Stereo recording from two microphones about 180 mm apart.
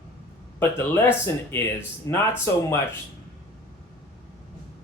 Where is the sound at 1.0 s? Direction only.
10° left (ahead or behind).